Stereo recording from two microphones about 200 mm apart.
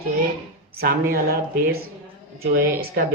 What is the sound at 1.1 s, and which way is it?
Speech, 50° right (ahead or behind).